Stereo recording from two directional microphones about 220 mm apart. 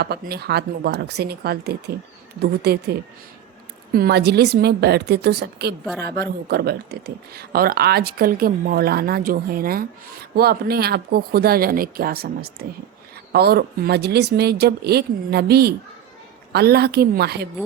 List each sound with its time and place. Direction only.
0.0 s speech: 45° right (ahead or behind)
3.9 s speech: 45° right (ahead or behind)